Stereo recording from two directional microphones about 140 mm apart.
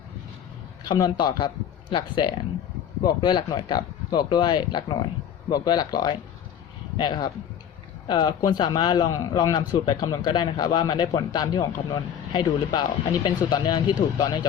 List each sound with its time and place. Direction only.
0.9 s a man's voice: 30° left (ahead or behind)